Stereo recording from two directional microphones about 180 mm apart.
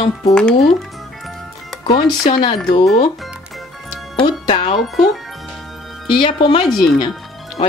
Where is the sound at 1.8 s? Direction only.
30° left (ahead or behind).